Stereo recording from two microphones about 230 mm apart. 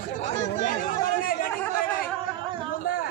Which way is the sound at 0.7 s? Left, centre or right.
Left.